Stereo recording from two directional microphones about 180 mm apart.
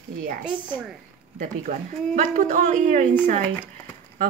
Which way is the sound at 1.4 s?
45° right (ahead or behind).